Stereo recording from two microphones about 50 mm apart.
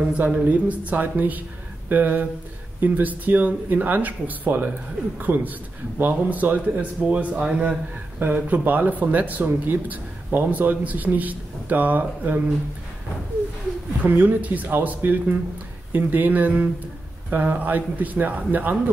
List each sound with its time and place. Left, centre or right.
0.0 s a man's voice: right
8.2 s speech: right
14.0 s speech: right